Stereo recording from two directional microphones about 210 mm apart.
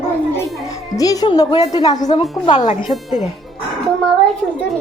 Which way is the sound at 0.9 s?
15° left (ahead or behind).